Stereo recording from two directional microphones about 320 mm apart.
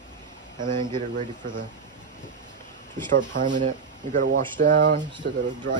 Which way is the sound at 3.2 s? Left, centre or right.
Right.